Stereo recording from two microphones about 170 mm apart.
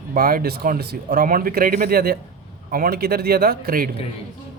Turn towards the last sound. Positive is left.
turn(degrees=-60)  # may be behind; listen again after turning